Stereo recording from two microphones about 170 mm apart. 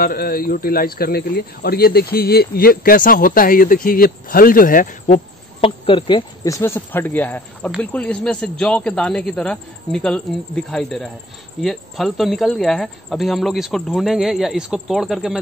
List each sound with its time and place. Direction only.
0.0 s speech: 60° left (ahead or behind)
5.6 s speech: 30° left (ahead or behind); by 15.3 s centre (ahead or behind)